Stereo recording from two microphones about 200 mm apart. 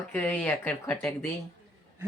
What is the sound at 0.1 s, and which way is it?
Speech, 10° left (ahead or behind).